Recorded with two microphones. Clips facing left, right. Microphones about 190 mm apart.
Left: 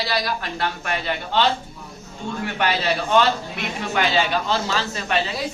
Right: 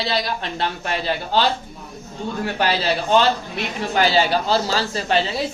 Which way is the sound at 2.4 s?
35° right (ahead or behind).